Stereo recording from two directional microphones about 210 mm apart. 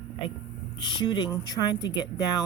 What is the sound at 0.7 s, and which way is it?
Speech, 20° left (ahead or behind).